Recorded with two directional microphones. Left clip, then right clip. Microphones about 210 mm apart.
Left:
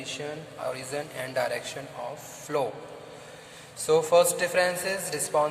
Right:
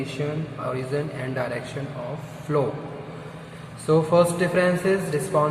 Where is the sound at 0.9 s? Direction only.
35° left (ahead or behind).